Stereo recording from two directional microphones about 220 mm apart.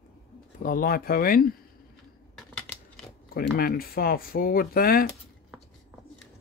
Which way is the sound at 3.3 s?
40° left (ahead or behind).